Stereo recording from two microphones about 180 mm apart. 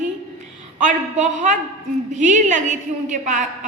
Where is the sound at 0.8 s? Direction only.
45° right (ahead or behind).